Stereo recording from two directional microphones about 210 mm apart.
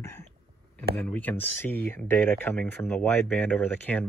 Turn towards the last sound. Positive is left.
turn(degrees=5)  # may be behind; listen again after turning